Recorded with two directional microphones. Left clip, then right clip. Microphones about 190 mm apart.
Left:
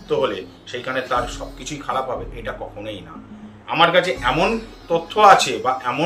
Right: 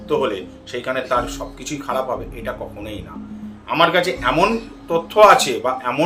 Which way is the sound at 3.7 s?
15° right (ahead or behind).